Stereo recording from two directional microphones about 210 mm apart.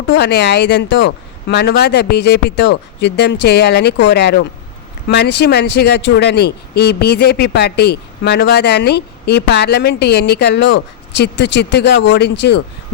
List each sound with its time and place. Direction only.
0.1 s speech: 50° left (ahead or behind)